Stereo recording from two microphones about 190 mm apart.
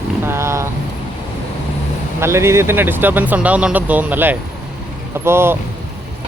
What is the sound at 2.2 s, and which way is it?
Speech, 15° right (ahead or behind).